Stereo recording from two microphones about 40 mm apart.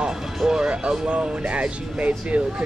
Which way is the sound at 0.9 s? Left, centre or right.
Right.